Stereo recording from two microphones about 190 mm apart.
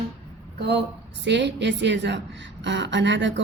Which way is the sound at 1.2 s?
65° right (ahead or behind).